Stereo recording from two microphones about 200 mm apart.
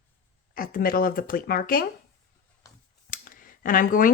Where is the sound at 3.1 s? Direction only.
45° left (ahead or behind).